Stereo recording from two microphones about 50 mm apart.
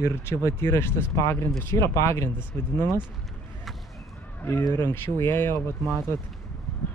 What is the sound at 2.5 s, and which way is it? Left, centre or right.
Speech, left.